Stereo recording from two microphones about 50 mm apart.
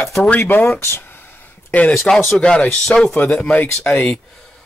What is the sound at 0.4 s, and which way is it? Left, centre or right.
Speech, left.